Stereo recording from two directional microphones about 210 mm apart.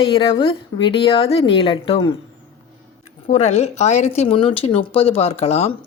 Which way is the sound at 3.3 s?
30° left (ahead or behind).